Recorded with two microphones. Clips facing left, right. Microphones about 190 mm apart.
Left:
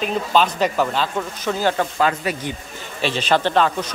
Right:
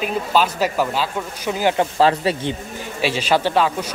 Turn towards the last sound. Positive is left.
turn(degrees=-10)  # may be behind; listen again after turning